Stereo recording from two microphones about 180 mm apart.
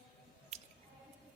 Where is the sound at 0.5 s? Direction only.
35° right (ahead or behind).